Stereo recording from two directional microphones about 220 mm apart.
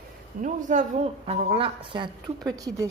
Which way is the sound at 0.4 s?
35° right (ahead or behind).